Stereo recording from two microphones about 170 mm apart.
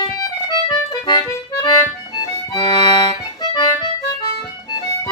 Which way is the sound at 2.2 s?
25° left (ahead or behind).